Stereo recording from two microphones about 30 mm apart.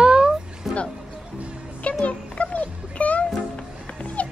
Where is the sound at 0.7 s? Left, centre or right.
Centre.